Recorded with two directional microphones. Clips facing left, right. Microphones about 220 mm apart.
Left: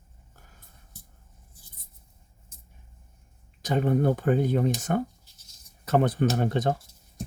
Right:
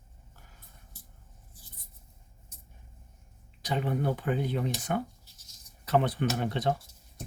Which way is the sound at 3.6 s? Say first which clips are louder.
Left 6 dB; 45° left (ahead or behind).